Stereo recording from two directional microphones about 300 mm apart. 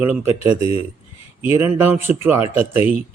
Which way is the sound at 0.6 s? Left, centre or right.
Centre.